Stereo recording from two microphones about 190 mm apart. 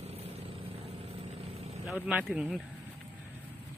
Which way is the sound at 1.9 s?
5° right (ahead or behind).